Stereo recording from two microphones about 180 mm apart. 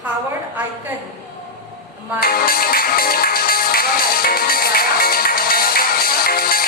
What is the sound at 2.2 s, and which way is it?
Music, 55° left (ahead or behind).